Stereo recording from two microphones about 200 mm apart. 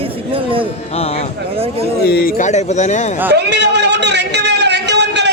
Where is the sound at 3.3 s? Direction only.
60° right (ahead or behind).